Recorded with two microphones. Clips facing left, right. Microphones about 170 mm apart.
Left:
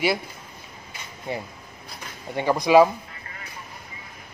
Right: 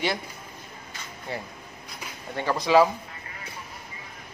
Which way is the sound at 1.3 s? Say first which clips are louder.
Left 4 dB; 15° left (ahead or behind).